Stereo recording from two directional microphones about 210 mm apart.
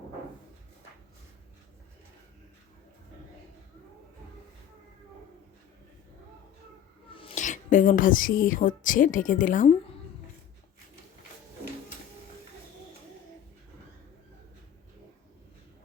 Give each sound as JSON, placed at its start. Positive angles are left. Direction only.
{"t": 7.1, "sound": "speech", "side_deg": 25}